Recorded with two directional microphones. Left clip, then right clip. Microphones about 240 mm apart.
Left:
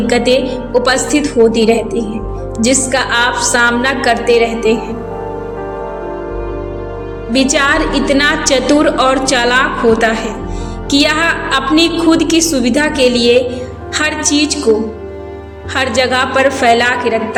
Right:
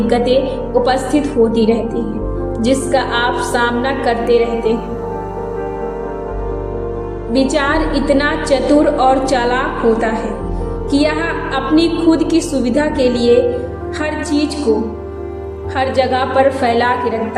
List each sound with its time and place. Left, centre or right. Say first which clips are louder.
0.1 s a woman's voice: left 2 dB; left
7.3 s a woman's voice: left 3 dB; left
15.7 s a woman's voice: left 2 dB; left